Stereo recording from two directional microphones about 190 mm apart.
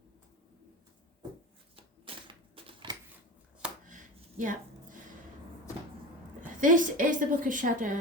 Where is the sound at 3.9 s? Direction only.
40° right (ahead or behind).